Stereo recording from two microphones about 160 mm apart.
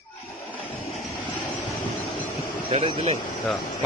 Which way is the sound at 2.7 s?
30° right (ahead or behind).